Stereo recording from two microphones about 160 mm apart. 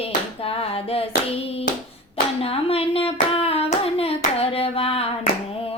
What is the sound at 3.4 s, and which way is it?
Hands, 40° left (ahead or behind).